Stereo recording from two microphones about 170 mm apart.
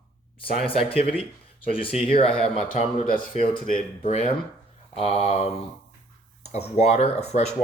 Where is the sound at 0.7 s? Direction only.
35° left (ahead or behind).